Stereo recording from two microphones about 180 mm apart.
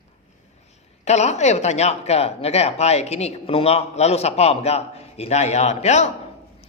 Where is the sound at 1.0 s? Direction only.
40° left (ahead or behind).